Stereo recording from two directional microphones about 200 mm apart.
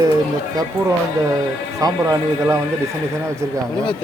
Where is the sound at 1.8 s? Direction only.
15° right (ahead or behind).